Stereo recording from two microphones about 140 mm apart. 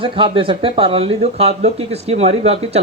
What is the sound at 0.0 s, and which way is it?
Speech, 40° right (ahead or behind).